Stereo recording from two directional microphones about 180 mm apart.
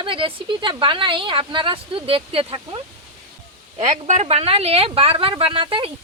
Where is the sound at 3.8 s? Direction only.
40° right (ahead or behind).